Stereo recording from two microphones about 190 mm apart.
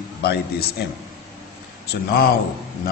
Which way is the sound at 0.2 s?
55° left (ahead or behind).